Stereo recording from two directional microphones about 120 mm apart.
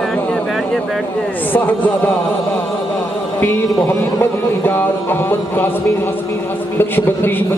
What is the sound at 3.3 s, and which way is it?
A man's voice, 15° left (ahead or behind).